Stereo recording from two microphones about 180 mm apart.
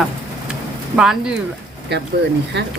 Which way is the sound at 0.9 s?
5° right (ahead or behind).